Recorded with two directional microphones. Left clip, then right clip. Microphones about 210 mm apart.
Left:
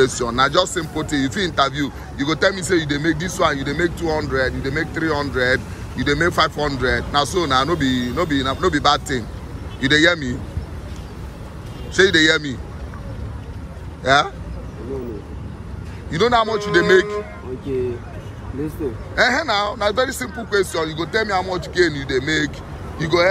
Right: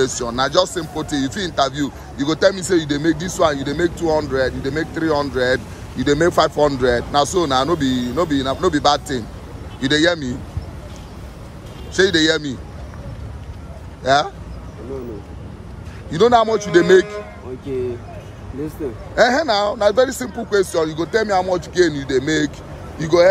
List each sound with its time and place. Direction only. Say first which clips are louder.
0.0 s speech: left 2 dB; 20° right (ahead or behind)
11.9 s speech: left 1 dB; 25° right (ahead or behind)
14.0 s speech: even; 25° right (ahead or behind)
16.1 s speech: right 3 dB; 30° right (ahead or behind)
19.1 s speech: right 2 dB; 30° right (ahead or behind)